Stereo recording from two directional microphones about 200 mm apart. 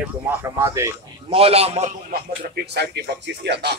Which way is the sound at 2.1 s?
55° right (ahead or behind).